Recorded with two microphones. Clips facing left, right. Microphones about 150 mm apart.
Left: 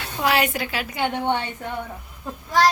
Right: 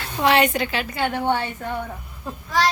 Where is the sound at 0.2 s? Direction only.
5° left (ahead or behind).